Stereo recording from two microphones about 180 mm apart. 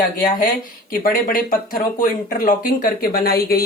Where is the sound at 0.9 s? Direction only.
50° left (ahead or behind).